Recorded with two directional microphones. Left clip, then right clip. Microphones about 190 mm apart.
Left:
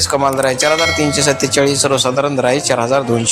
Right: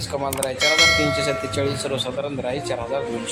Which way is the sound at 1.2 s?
15° left (ahead or behind).